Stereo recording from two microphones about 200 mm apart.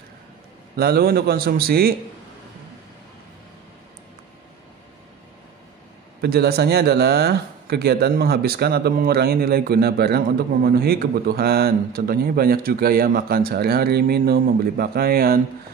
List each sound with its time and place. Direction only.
0.7 s speech: 50° right (ahead or behind)
6.2 s speech: 55° right (ahead or behind)